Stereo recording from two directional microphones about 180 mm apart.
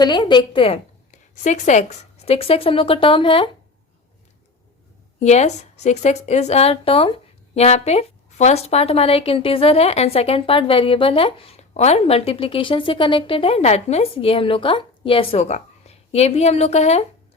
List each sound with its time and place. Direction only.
0.0 s a woman's voice: 25° left (ahead or behind)
5.2 s a woman's voice: 40° left (ahead or behind)